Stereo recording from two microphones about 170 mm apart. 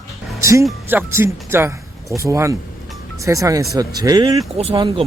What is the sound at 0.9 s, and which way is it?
Speech, 15° right (ahead or behind).